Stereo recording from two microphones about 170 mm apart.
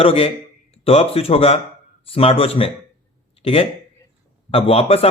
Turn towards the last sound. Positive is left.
turn(degrees=35)  # may be behind; listen again after turning